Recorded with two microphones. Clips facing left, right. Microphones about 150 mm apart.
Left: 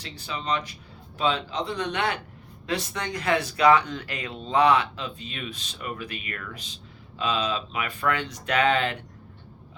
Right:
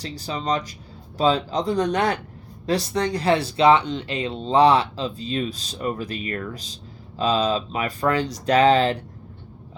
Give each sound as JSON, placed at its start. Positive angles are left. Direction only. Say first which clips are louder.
{"t": 0.0, "sound": "speech", "louder": "right 6 dB", "side_deg": -40}